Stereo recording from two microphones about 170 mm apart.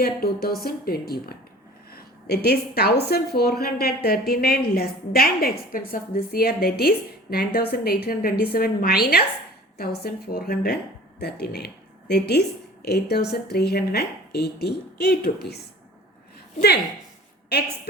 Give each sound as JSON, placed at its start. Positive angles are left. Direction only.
{"t": 0.0, "sound": "a woman's voice", "side_deg": 65}